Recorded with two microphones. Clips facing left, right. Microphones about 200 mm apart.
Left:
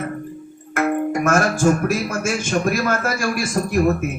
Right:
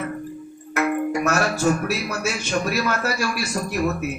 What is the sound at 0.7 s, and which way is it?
Speech, 50° left (ahead or behind).